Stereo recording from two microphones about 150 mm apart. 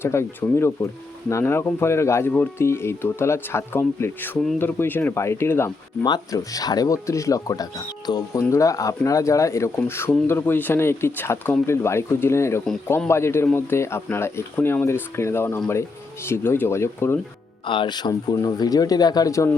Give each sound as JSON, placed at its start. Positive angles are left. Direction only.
{"t": 0.0, "sound": "speech", "side_deg": 15}
{"t": 17.7, "sound": "speech", "side_deg": 30}